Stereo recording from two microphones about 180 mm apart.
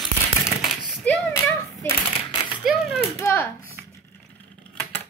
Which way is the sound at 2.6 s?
Centre (ahead or behind).